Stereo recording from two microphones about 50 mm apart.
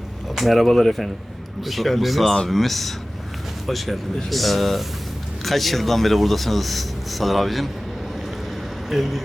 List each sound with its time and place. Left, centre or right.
0.3 s speech: centre
8.9 s speech: centre